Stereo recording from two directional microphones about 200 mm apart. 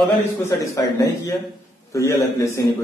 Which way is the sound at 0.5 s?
15° left (ahead or behind).